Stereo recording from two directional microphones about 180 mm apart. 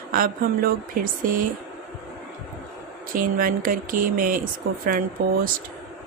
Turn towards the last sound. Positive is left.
turn(degrees=-50)  # may be behind; listen again after turning